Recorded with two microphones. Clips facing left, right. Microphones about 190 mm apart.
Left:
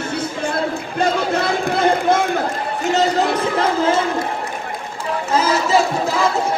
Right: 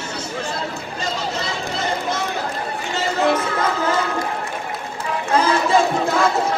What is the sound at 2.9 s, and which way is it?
Music, 35° left (ahead or behind).